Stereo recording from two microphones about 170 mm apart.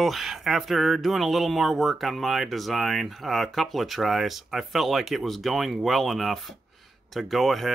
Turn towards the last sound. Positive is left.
turn(degrees=0)  # may be behind; listen again after turning